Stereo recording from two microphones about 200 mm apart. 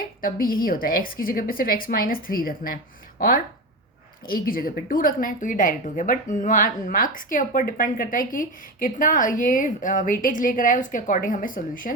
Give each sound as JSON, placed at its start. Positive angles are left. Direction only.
{"t": 0.2, "sound": "a woman's voice", "side_deg": 45}